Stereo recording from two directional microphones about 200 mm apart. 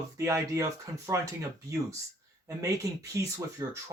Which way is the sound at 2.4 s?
15° right (ahead or behind).